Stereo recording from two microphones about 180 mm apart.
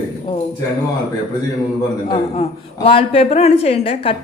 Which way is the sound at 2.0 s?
30° left (ahead or behind).